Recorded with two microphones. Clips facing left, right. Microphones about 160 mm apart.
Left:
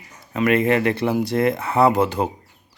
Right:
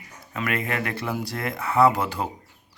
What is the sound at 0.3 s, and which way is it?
Speech, 25° left (ahead or behind).